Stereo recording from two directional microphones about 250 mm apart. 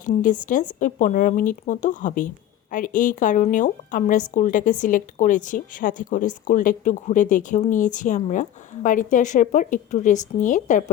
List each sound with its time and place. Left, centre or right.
0.0 s a woman's voice: left